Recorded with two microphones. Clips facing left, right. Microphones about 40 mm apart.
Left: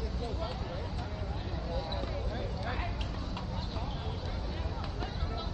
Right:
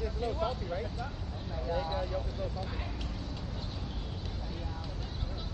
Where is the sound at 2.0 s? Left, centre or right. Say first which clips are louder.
Right 2 dB; centre.